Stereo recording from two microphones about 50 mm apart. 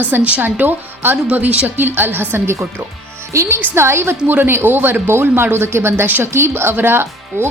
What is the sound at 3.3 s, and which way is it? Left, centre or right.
Speech, right.